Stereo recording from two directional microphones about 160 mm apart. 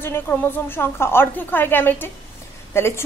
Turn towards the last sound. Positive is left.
turn(degrees=15)  # may be behind; listen again after turning